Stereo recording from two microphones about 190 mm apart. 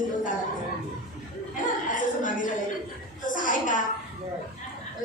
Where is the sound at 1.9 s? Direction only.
45° left (ahead or behind).